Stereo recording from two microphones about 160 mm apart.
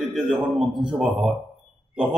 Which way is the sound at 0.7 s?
30° right (ahead or behind).